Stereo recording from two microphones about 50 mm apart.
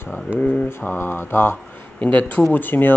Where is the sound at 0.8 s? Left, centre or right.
Left.